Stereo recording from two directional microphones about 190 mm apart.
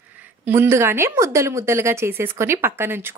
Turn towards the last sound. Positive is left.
turn(degrees=-10)  # may be behind; listen again after turning